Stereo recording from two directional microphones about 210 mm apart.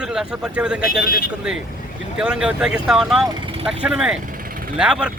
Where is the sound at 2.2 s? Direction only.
5° right (ahead or behind).